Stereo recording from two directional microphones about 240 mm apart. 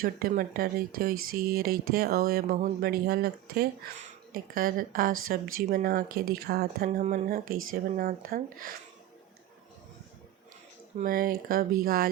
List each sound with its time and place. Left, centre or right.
0.0 s speech: right
7.4 s speech: right
7.7 s speech: right
10.9 s speech: right